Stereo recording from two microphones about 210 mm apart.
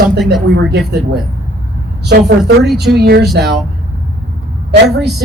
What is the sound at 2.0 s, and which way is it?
Speech, 50° right (ahead or behind).